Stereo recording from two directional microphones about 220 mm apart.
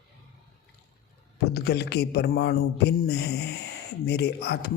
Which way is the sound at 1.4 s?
50° left (ahead or behind).